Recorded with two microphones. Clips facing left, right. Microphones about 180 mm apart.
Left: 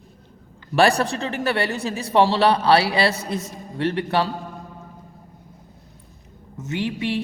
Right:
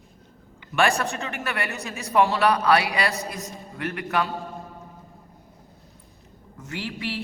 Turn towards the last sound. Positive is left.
turn(degrees=20)  # may be behind; listen again after turning